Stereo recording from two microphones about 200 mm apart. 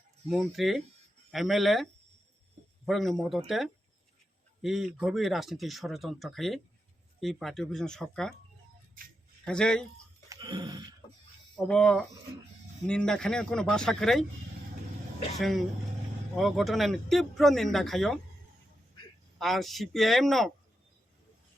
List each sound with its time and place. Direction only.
0.3 s speech: centre (ahead or behind)
9.4 s speech: 5° left (ahead or behind)
10.2 s a sound: 20° right (ahead or behind)
11.5 s speech: 5° left (ahead or behind)
15.4 s speech: centre (ahead or behind)
19.4 s speech: centre (ahead or behind)